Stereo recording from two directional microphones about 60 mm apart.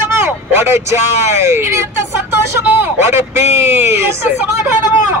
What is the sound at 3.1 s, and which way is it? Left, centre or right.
Speech, right.